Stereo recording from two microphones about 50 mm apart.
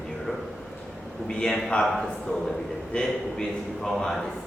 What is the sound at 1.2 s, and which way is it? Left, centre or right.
Speech, centre.